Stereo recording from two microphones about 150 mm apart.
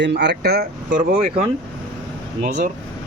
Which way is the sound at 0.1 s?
90° right.